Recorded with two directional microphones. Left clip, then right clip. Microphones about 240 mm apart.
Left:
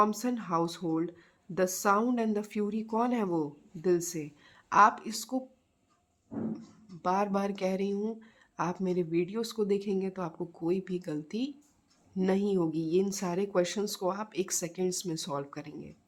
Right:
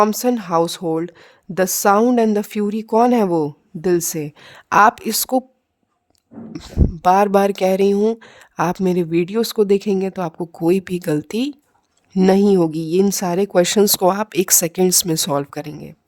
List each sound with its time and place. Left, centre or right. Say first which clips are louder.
0.0 s speech: right 12 dB; right
6.5 s speech: right 19 dB; right